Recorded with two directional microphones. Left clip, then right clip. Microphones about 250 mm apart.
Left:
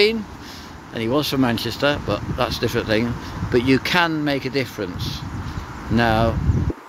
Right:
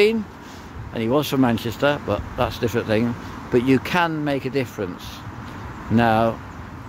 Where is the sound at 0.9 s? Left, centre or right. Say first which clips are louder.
Even; centre.